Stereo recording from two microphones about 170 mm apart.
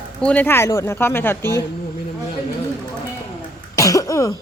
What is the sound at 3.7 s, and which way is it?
Cough, 20° left (ahead or behind).